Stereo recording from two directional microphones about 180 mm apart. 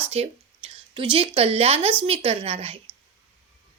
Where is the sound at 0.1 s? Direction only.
30° right (ahead or behind).